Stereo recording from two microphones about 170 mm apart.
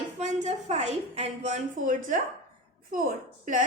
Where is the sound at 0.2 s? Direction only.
40° right (ahead or behind).